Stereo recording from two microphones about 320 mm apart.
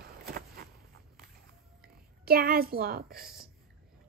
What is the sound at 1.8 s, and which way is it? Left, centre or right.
A woman's voice, right.